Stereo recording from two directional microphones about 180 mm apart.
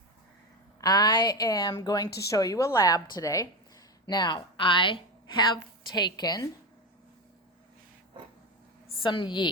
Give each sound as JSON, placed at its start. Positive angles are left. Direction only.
{"t": 0.8, "sound": "a woman's voice", "side_deg": 20}
{"t": 9.0, "sound": "a woman's voice", "side_deg": 25}